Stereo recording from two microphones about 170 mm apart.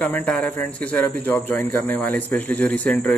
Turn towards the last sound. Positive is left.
turn(degrees=10)  # may be behind; listen again after turning